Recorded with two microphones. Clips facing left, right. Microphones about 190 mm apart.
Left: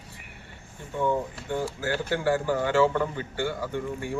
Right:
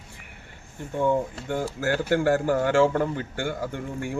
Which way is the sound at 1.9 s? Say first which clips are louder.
Right 4 dB; 50° right (ahead or behind).